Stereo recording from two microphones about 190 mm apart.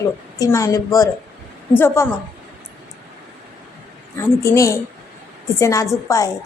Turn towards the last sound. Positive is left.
turn(degrees=15)  # may be behind; listen again after turning